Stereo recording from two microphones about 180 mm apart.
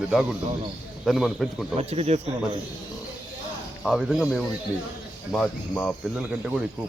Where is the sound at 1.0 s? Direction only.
Centre (ahead or behind).